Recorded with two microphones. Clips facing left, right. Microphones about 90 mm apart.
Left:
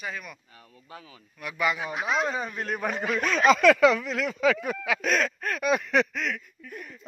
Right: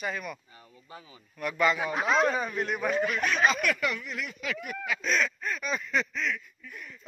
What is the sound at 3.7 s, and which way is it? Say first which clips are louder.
Speech: left 11 dB; 90° left.